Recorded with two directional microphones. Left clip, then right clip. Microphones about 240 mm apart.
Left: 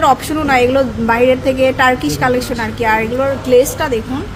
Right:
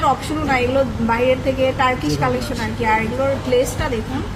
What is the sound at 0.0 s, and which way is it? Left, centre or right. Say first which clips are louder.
A woman's voice: left 6 dB; left.